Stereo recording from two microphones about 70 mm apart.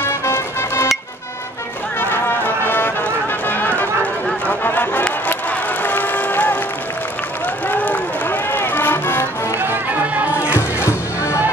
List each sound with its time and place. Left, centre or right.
0.0 s music: left
2.0 s music: left
5.5 s crowd: left
7.6 s run: left
9.6 s music: right
10.5 s music: left